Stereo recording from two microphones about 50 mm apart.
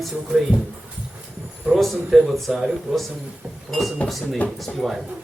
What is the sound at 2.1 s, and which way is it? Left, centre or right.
Chant, centre.